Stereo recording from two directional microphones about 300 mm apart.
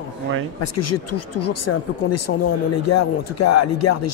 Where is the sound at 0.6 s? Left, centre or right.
Left.